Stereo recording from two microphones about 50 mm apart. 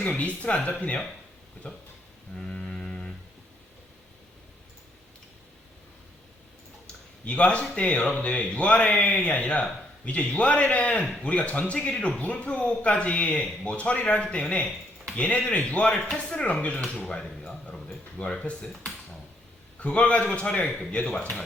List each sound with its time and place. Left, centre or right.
0.0 s speech: left
2.3 s music: centre
7.3 s speech: left
16.8 s speech: centre
18.2 s speech: left
19.8 s speech: left